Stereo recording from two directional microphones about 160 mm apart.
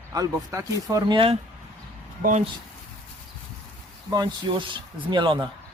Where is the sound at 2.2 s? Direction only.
50° right (ahead or behind).